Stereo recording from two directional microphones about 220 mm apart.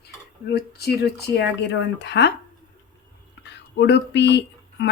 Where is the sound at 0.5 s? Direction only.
45° left (ahead or behind).